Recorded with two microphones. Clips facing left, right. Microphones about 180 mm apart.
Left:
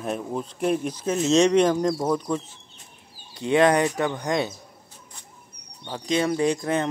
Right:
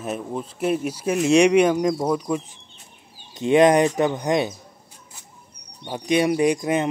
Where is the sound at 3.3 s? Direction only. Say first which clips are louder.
Right 4 dB; 20° right (ahead or behind).